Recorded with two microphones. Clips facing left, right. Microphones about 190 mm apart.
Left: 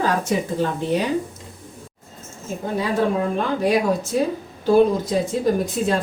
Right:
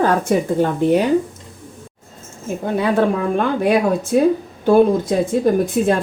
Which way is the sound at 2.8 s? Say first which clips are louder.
Right 3 dB; 55° right (ahead or behind).